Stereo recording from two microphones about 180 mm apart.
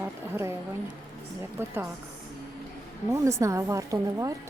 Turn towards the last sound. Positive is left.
turn(degrees=-20)  # may be behind; listen again after turning